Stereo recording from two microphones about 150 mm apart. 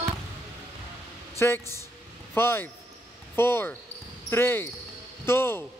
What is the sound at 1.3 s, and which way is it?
Speech, 15° left (ahead or behind).